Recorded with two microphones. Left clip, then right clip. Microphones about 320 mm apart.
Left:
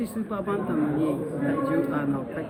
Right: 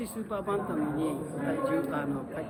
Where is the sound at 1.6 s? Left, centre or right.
Left.